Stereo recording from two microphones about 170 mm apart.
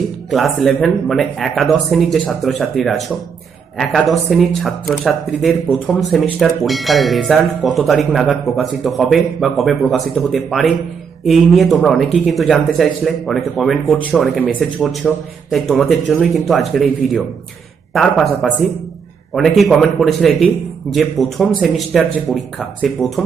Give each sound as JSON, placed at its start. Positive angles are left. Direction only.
{"t": 0.3, "sound": "speech", "side_deg": 0}